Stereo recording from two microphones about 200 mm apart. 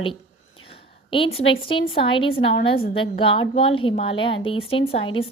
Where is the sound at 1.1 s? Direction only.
25° left (ahead or behind).